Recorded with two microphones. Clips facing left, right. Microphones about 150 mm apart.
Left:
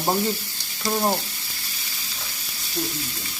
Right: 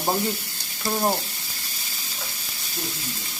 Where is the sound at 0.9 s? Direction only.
5° left (ahead or behind).